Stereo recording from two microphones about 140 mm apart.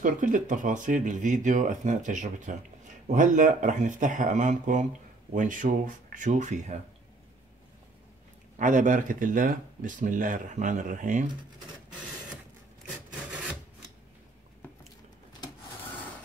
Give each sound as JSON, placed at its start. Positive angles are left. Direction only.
{"t": 0.0, "sound": "speech", "side_deg": -65}
{"t": 8.5, "sound": "speech", "side_deg": -65}